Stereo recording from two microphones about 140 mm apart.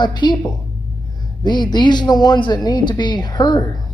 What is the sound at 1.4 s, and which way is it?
A man's voice, 30° left (ahead or behind).